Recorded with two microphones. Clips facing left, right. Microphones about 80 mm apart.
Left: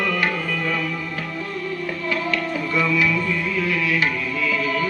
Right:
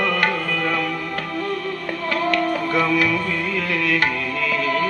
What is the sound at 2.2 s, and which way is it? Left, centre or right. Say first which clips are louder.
Music: right 4 dB; right.